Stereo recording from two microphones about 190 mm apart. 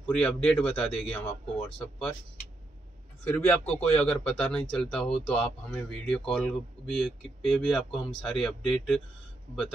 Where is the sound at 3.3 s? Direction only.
5° left (ahead or behind).